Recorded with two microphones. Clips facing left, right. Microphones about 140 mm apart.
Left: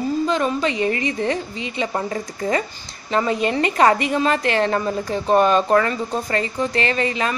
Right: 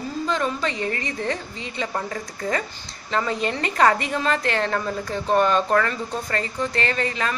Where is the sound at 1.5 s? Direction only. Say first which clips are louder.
Left 5 dB; 90° left.